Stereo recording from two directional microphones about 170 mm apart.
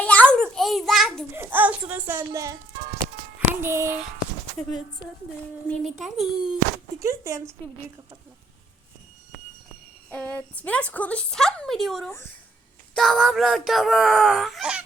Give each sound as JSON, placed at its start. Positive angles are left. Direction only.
{"t": 0.0, "sound": "a sound", "side_deg": 10}
{"t": 1.3, "sound": "speech", "side_deg": -10}
{"t": 5.6, "sound": "speech", "side_deg": 0}
{"t": 7.0, "sound": "speech", "side_deg": -20}
{"t": 10.1, "sound": "a woman's voice", "side_deg": 10}